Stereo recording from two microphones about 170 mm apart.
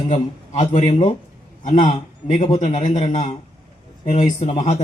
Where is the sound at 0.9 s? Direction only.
30° left (ahead or behind).